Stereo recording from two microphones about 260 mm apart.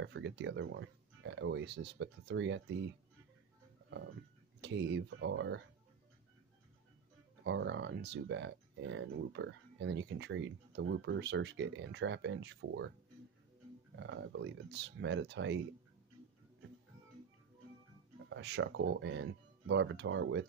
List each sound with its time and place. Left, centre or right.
0.0 s speech: right
4.6 s speech: right
7.4 s speech: right
13.9 s speech: right
18.3 s speech: right